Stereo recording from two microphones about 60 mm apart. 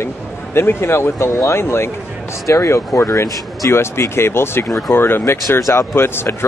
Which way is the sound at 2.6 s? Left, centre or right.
Left.